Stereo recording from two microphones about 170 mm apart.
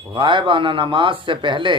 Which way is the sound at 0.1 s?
30° right (ahead or behind).